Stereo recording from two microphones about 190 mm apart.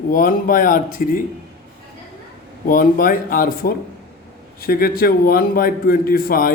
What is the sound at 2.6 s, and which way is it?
Speech, 45° left (ahead or behind).